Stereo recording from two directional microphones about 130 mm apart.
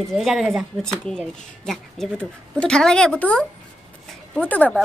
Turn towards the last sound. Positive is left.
turn(degrees=10)  # may be behind; listen again after turning